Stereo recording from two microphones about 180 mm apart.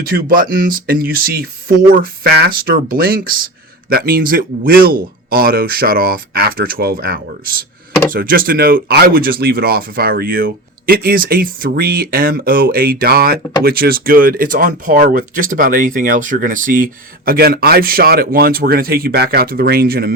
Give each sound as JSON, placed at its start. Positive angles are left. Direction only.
{"t": 0.0, "sound": "speech", "side_deg": -55}